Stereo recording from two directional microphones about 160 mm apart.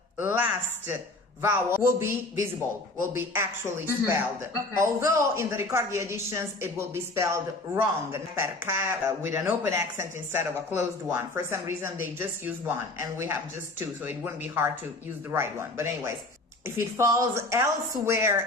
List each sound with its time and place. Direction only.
0.2 s speech: 10° right (ahead or behind)